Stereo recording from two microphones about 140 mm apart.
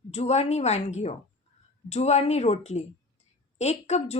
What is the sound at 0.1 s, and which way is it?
A woman's voice, 50° left (ahead or behind).